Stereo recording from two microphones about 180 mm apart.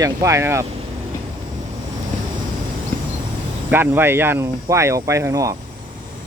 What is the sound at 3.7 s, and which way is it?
Speech, 10° right (ahead or behind).